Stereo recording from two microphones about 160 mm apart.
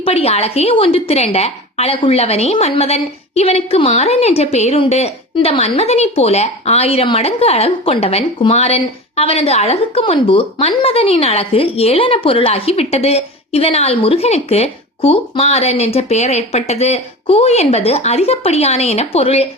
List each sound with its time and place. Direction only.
0.0 s a woman's voice: 40° left (ahead or behind)